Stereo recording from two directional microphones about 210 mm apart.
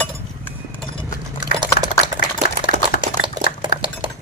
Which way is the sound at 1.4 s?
20° right (ahead or behind).